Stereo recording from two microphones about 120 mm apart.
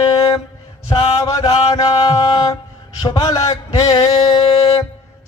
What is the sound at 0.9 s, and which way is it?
Mantra, 50° left (ahead or behind).